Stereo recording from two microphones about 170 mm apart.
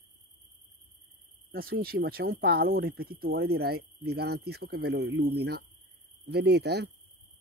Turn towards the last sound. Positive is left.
turn(degrees=-75)  # may be behind; listen again after turning